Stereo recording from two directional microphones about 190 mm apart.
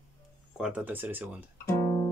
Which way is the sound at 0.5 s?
5° right (ahead or behind).